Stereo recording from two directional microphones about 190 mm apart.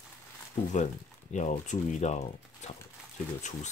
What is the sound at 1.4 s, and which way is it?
Speech, 40° left (ahead or behind).